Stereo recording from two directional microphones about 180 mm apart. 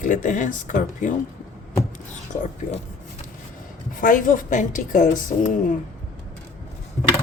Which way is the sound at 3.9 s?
50° left (ahead or behind).